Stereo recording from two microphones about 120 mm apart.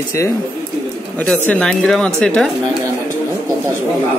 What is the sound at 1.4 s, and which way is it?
Speech, 10° left (ahead or behind).